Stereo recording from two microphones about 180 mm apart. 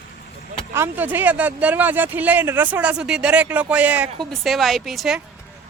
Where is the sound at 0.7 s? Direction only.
10° right (ahead or behind).